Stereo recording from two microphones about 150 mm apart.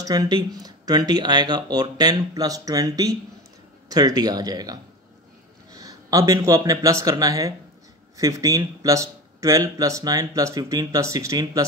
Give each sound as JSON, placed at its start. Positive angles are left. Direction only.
{"t": 0.0, "sound": "speech", "side_deg": -25}